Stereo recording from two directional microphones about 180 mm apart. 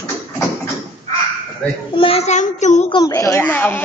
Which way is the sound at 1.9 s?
30° left (ahead or behind).